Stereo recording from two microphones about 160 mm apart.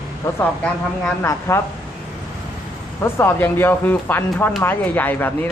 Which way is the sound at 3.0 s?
15° left (ahead or behind).